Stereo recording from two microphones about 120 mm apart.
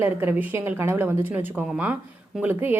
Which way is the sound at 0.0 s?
15° right (ahead or behind).